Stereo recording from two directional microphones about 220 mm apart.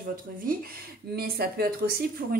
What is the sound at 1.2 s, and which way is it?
A woman's voice, 45° right (ahead or behind).